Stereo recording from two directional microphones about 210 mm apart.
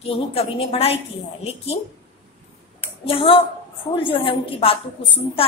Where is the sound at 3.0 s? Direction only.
25° left (ahead or behind).